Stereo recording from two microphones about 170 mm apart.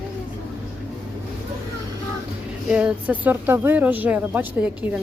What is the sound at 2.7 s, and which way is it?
Speech, 5° right (ahead or behind).